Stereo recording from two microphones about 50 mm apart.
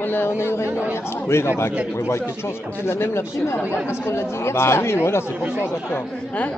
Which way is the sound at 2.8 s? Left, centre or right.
Left.